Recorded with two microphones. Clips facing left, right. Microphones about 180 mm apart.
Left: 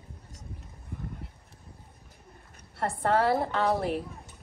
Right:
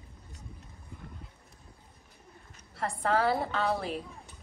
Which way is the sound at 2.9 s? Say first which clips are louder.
Left 3 dB; 25° left (ahead or behind).